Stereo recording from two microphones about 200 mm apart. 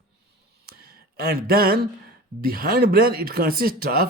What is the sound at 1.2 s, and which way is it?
A man's voice, 50° right (ahead or behind).